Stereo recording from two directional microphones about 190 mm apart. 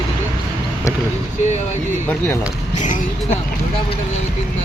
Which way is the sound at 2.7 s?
40° left (ahead or behind).